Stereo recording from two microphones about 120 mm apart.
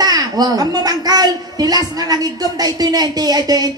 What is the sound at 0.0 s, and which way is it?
A woman's voice, 30° right (ahead or behind).